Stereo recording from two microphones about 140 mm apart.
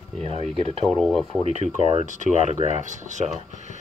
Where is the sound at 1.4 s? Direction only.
55° right (ahead or behind).